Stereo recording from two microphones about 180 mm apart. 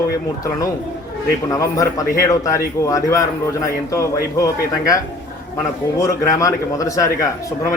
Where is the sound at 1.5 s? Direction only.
20° left (ahead or behind).